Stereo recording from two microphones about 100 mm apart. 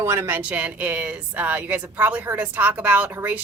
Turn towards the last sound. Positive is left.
turn(degrees=-15)  # may be behind; listen again after turning